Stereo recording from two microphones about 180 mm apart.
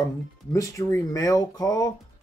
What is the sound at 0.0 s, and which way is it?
Speech, 15° left (ahead or behind).